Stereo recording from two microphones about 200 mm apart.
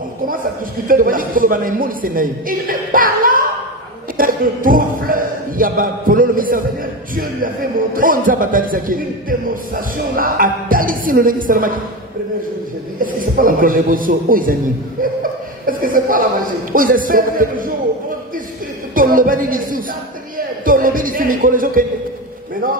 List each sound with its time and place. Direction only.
0.8 s a man's voice: 45° right (ahead or behind)
13.0 s a man's voice: 45° right (ahead or behind)
15.6 s chuckle: 45° right (ahead or behind)
16.7 s a man's voice: 45° right (ahead or behind)
18.9 s a man's voice: 45° right (ahead or behind)